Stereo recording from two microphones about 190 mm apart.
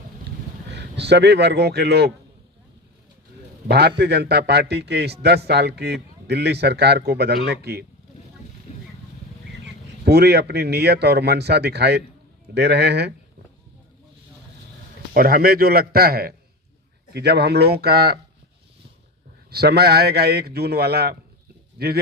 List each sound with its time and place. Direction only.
0.7 s a man's voice: 65° right (ahead or behind)
3.7 s a man's voice: 60° right (ahead or behind)
8.7 s a sound: 35° left (ahead or behind)
10.0 s a man's voice: 60° right (ahead or behind)
15.1 s a man's voice: 50° right (ahead or behind)
19.5 s a man's voice: 55° right (ahead or behind)